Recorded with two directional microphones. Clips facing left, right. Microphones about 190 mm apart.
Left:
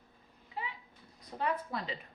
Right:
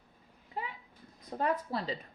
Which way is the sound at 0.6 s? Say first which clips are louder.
Right 2 dB; 45° right (ahead or behind).